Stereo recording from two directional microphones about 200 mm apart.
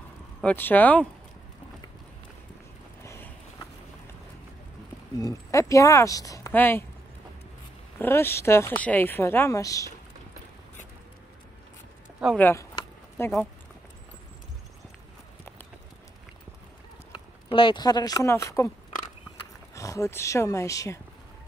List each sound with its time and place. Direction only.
0.4 s speech: 10° left (ahead or behind)
3.0 s a sound: 15° left (ahead or behind)
5.2 s speech: 15° left (ahead or behind)
8.0 s speech: 10° left (ahead or behind)
12.4 s speech: 10° left (ahead or behind)
17.1 s speech: 25° left (ahead or behind)
19.7 s speech: 15° left (ahead or behind)